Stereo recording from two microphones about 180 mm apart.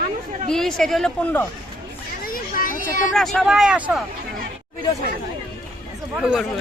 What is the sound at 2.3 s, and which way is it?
Children playing, 50° left (ahead or behind).